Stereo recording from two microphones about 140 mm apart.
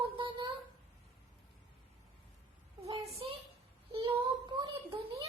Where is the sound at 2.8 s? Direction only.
45° right (ahead or behind).